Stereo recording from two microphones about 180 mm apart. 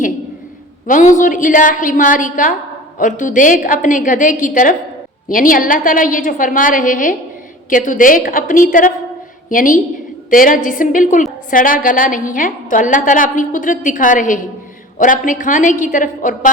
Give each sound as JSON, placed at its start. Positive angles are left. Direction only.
{"t": 0.9, "sound": "a woman's voice", "side_deg": 45}